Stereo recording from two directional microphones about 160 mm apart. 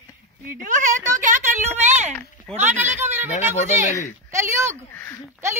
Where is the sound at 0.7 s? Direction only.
50° right (ahead or behind).